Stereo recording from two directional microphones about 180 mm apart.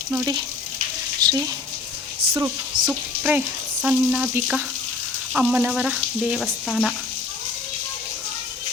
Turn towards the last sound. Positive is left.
turn(degrees=5)  # may be behind; listen again after turning